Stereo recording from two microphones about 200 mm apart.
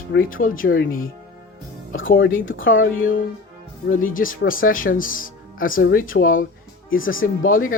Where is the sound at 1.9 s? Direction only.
75° left (ahead or behind).